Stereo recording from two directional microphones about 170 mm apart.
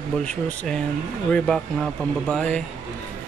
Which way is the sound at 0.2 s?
5° left (ahead or behind).